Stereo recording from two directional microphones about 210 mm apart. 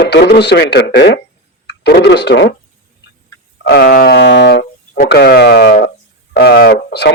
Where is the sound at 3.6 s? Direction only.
50° left (ahead or behind).